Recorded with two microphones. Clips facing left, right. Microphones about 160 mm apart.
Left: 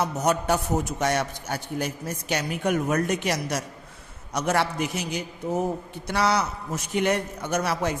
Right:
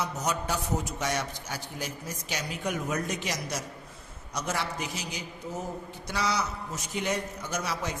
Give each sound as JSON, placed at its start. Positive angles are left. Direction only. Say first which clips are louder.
{"t": 0.0, "sound": "a man's voice", "louder": "left 7 dB", "side_deg": 55}